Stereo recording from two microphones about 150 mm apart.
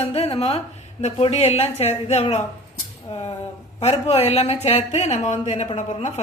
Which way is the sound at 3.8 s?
45° left (ahead or behind).